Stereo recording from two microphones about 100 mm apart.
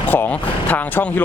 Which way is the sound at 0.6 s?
15° left (ahead or behind).